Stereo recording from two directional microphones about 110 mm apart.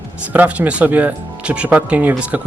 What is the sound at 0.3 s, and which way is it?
Speech, 15° right (ahead or behind).